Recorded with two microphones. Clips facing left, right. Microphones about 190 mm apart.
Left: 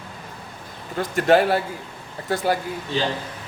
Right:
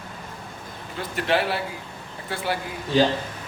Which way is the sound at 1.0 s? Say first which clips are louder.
Left 7 dB; 45° left (ahead or behind).